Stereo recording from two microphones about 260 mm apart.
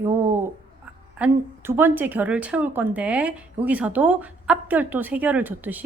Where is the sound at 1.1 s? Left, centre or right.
Centre.